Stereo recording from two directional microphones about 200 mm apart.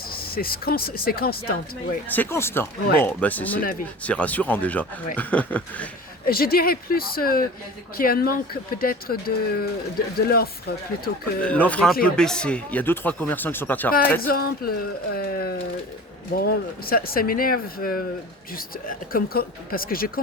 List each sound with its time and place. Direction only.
0.2 s speech: 50° left (ahead or behind)
2.0 s speech: 10° left (ahead or behind)
6.2 s speech: 50° left (ahead or behind)
11.4 s speech: 5° left (ahead or behind)
14.3 s speech: 50° left (ahead or behind)